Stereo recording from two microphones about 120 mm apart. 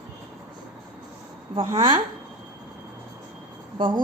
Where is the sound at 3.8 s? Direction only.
45° right (ahead or behind).